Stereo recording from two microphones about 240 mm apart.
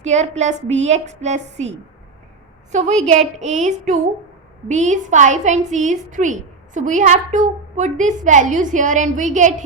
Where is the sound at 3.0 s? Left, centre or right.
Right.